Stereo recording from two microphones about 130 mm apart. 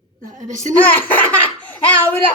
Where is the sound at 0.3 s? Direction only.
75° right (ahead or behind).